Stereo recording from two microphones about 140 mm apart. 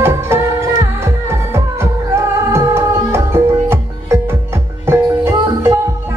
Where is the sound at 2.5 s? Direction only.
20° right (ahead or behind).